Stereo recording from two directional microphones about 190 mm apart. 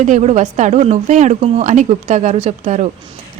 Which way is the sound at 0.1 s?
35° right (ahead or behind).